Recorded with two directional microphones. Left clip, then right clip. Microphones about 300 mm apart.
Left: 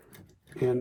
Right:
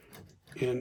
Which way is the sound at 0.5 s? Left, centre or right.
Centre.